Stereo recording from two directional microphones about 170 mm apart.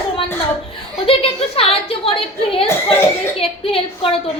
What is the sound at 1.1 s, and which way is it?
A woman's voice, 35° left (ahead or behind).